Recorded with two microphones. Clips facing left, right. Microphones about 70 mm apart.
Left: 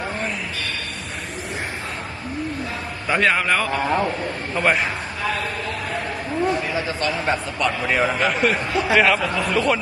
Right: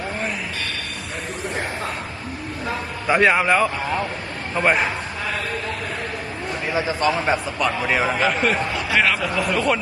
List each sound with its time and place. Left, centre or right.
3.1 s a man's voice: centre
6.7 s a man's voice: centre
7.6 s a man's voice: centre
8.7 s a sound: left
9.1 s a man's voice: centre